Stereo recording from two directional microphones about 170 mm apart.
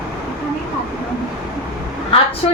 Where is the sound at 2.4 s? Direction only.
30° left (ahead or behind).